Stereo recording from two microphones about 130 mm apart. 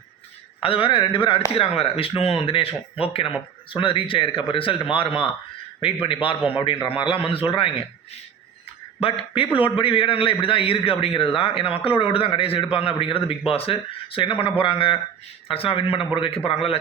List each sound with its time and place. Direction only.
0.6 s a man's voice: 45° left (ahead or behind)
9.0 s a man's voice: 45° left (ahead or behind)